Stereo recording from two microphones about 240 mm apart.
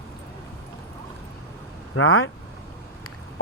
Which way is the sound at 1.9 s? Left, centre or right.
Left.